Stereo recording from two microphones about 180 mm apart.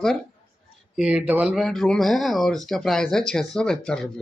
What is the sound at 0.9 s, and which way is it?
Speech, 5° right (ahead or behind).